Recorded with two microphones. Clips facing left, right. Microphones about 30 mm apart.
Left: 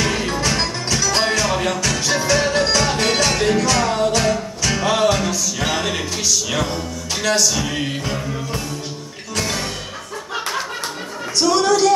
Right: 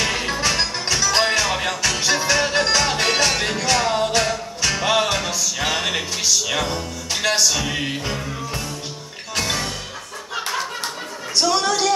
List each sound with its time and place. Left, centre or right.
0.0 s music: centre
4.2 s music: centre
4.8 s music: centre
11.4 s a woman's voice: centre